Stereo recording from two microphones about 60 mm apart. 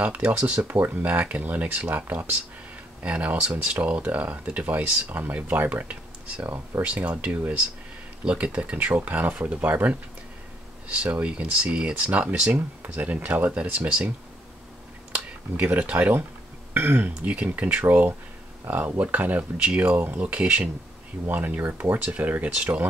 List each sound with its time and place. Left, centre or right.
0.0 s speech: right
11.1 s speech: right
15.1 s speech: right
17.3 s speech: right